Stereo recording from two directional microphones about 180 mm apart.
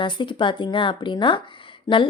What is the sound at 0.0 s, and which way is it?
Speech, 25° left (ahead or behind).